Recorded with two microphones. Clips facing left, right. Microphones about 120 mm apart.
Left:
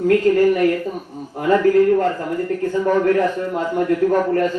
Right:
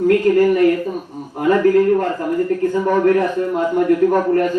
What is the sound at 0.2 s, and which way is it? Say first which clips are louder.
Speech: right 1 dB; 15° right (ahead or behind).